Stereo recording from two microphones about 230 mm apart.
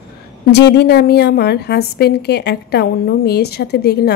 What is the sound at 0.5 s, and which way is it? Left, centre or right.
A woman's voice, left.